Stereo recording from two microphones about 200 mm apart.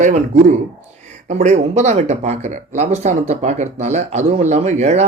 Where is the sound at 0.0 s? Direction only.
35° right (ahead or behind).